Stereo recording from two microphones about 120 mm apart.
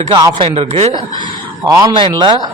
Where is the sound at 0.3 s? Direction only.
50° right (ahead or behind).